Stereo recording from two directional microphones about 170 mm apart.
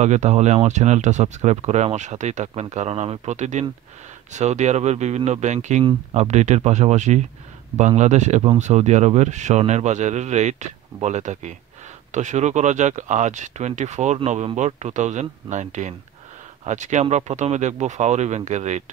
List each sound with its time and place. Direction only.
0.0 s speech: 40° right (ahead or behind)